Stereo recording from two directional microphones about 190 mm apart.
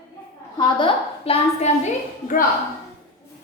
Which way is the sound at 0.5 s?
25° left (ahead or behind).